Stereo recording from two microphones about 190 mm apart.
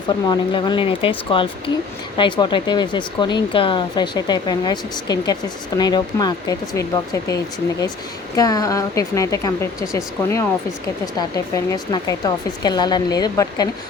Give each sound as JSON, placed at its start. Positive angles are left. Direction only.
{"t": 0.3, "sound": "speech", "side_deg": 25}
{"t": 8.4, "sound": "a woman's voice", "side_deg": 20}